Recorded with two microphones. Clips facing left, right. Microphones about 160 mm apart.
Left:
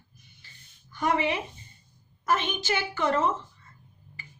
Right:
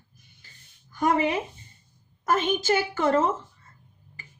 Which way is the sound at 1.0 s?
45° right (ahead or behind).